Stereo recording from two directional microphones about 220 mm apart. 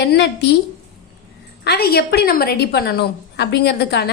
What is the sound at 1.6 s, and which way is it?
A woman's voice, 45° left (ahead or behind).